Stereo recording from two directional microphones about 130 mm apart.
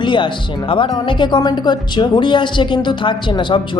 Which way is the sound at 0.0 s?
35° left (ahead or behind).